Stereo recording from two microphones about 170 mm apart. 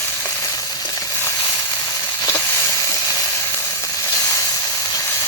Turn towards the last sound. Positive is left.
turn(degrees=15)  # may be behind; listen again after turning